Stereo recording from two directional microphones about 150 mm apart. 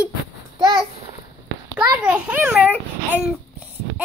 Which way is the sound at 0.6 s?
25° right (ahead or behind).